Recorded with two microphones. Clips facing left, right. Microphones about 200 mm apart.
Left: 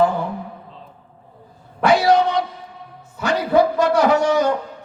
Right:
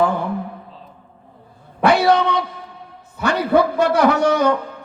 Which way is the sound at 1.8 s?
60° right (ahead or behind).